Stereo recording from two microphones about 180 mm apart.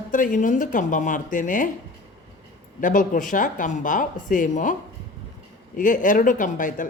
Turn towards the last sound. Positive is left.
turn(degrees=45)  # may be behind; listen again after turning